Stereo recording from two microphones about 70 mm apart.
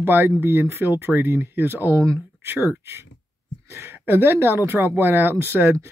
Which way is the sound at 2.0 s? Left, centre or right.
Right.